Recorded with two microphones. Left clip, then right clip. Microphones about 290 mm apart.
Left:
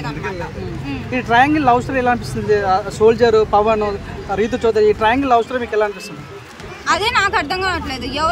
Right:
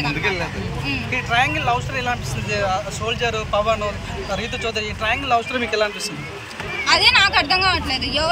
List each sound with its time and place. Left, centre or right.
1.1 s speech: left
6.9 s speech: centre